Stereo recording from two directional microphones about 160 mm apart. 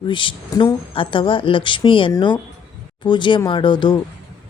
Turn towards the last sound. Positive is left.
turn(degrees=30)  # may be behind; listen again after turning